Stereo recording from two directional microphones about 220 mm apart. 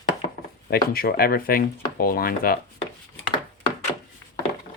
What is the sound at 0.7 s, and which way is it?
Speech, 45° left (ahead or behind).